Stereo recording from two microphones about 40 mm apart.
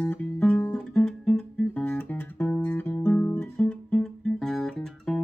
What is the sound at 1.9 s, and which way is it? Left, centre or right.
Music, left.